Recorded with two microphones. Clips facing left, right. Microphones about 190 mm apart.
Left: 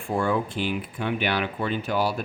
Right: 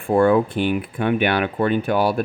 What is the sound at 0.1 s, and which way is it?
Speech, 55° right (ahead or behind).